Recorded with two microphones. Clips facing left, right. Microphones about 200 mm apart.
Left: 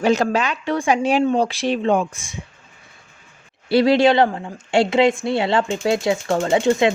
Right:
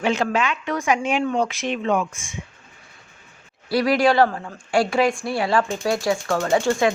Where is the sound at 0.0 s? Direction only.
40° left (ahead or behind).